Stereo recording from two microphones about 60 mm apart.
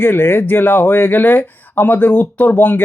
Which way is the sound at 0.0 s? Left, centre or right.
Left.